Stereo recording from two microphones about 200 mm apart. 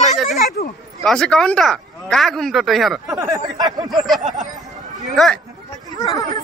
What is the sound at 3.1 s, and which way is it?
Speech, 15° right (ahead or behind).